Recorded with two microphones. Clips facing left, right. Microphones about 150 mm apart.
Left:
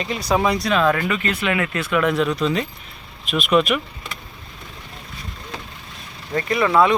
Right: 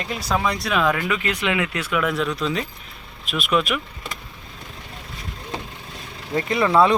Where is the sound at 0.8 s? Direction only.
10° right (ahead or behind).